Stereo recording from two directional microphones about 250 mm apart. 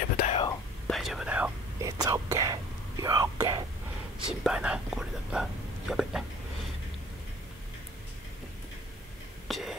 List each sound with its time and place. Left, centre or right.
0.2 s whispering: left
0.8 s whispering: centre
4.3 s speech: centre
9.5 s a sound: centre